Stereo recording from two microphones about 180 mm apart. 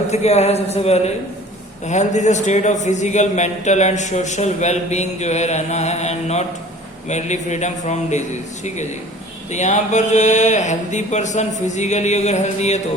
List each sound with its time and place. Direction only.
0.1 s a man's voice: 35° left (ahead or behind)